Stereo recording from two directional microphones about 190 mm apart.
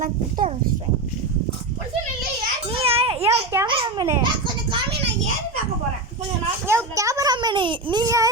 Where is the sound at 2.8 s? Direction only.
30° right (ahead or behind).